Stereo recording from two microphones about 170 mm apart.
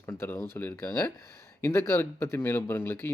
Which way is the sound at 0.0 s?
15° left (ahead or behind).